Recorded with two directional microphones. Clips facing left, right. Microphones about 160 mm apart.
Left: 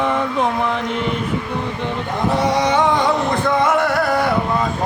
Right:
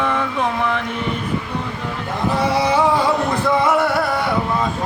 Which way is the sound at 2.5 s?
5° right (ahead or behind).